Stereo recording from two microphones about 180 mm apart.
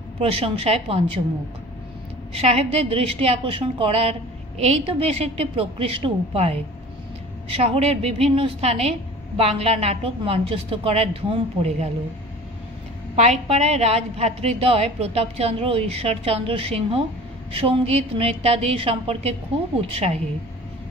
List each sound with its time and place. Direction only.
0.2 s a woman's voice: 35° right (ahead or behind)
2.4 s a woman's voice: 35° right (ahead or behind)
7.6 s a woman's voice: 35° right (ahead or behind)
13.1 s a woman's voice: 35° right (ahead or behind)